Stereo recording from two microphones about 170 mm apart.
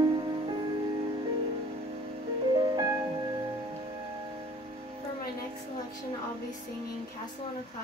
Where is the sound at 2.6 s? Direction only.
25° right (ahead or behind).